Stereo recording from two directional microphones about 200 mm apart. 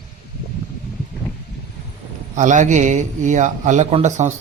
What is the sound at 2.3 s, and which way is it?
A man's voice, 40° right (ahead or behind).